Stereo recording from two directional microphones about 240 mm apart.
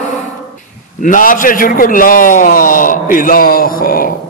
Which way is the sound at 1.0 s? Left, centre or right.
Left.